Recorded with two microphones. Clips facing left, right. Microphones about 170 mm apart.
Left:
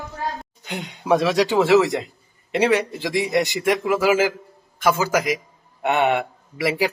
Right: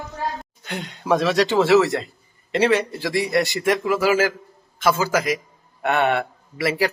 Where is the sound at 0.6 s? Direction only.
15° left (ahead or behind).